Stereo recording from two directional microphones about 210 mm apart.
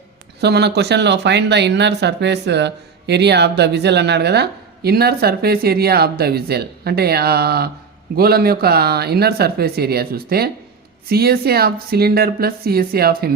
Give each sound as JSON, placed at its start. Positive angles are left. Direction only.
{"t": 0.4, "sound": "speech", "side_deg": -50}